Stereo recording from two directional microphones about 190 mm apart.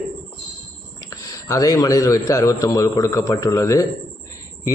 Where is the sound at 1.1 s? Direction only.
15° left (ahead or behind).